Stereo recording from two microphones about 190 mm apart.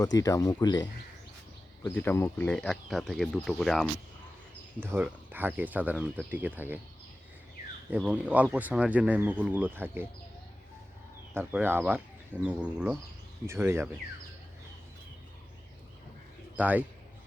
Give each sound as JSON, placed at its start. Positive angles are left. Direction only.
{"t": 0.2, "sound": "speech", "side_deg": 15}
{"t": 1.8, "sound": "speech", "side_deg": 10}
{"t": 4.8, "sound": "speech", "side_deg": -10}
{"t": 7.9, "sound": "speech", "side_deg": -10}
{"t": 11.3, "sound": "speech", "side_deg": -10}
{"t": 16.6, "sound": "speech", "side_deg": -10}